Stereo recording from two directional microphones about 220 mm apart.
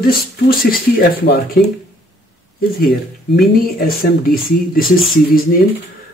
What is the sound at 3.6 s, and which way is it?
Speech, 45° left (ahead or behind).